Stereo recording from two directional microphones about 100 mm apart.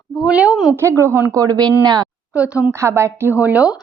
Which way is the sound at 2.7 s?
30° right (ahead or behind).